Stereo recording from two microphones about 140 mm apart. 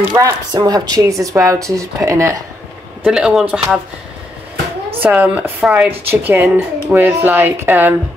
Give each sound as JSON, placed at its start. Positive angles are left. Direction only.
{"t": 0.2, "sound": "speech", "side_deg": -30}
{"t": 3.0, "sound": "speech", "side_deg": -5}
{"t": 5.0, "sound": "speech", "side_deg": -10}